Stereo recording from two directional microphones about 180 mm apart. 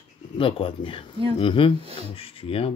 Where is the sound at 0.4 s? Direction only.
30° left (ahead or behind).